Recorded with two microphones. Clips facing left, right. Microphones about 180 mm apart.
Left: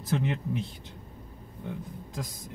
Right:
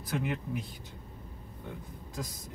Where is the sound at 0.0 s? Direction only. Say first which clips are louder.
Left 4 dB; 25° left (ahead or behind).